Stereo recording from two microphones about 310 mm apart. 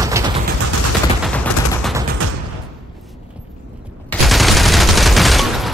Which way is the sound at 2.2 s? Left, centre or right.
Right.